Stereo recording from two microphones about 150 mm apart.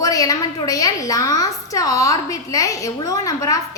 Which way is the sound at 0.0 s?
25° left (ahead or behind).